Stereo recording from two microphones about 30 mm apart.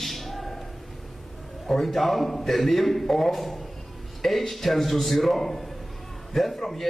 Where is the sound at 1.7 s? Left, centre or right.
Centre.